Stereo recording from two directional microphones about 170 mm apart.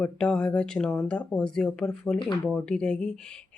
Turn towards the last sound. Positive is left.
turn(degrees=5)  # may be behind; listen again after turning